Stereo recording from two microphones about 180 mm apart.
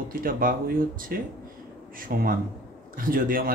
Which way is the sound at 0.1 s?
50° right (ahead or behind).